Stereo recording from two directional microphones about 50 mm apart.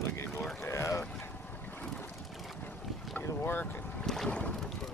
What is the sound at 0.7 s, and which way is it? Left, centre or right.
Boat, left.